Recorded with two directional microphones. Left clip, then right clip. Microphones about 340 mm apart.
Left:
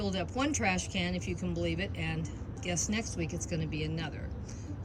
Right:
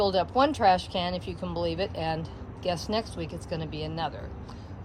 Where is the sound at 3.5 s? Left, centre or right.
Centre.